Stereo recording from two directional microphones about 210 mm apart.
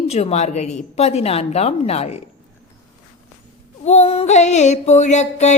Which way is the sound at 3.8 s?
30° left (ahead or behind).